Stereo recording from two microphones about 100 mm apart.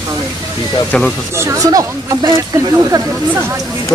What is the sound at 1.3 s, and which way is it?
A woman's voice, 35° right (ahead or behind).